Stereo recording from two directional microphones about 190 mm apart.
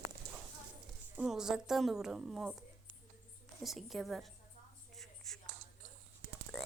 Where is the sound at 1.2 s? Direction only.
5° right (ahead or behind).